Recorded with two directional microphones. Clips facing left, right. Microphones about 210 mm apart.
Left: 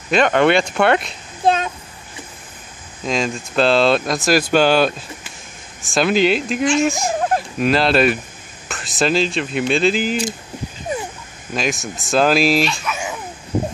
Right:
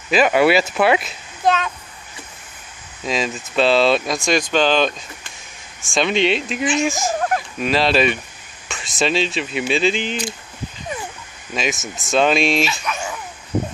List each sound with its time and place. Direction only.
0.1 s speech: 5° right (ahead or behind)
1.4 s a child's voice: 30° left (ahead or behind)
3.1 s speech: centre (ahead or behind)
7.2 s a sound: 25° left (ahead or behind)
7.6 s speech: centre (ahead or behind)
11.5 s speech: centre (ahead or behind)